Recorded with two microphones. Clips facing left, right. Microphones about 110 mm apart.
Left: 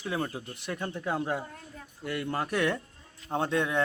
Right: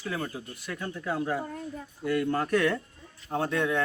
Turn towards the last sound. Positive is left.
turn(degrees=20)  # may be behind; listen again after turning